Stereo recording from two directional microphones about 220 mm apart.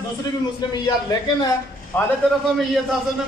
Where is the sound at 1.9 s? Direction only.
10° left (ahead or behind).